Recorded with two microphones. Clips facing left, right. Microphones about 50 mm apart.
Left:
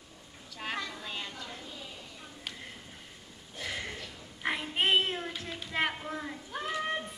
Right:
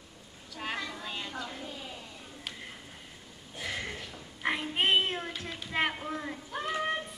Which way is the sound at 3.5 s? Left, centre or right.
Centre.